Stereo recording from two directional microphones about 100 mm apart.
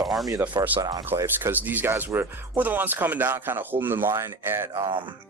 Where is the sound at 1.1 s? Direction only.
20° right (ahead or behind).